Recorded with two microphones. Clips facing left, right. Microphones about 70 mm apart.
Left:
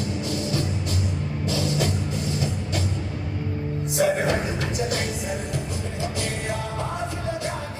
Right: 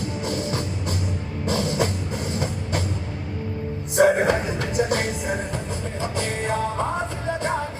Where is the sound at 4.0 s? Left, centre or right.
Right.